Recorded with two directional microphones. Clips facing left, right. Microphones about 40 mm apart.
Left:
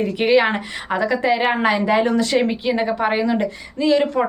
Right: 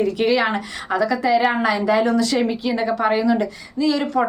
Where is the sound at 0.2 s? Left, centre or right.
Left.